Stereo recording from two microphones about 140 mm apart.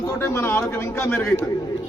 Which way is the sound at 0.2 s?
20° left (ahead or behind).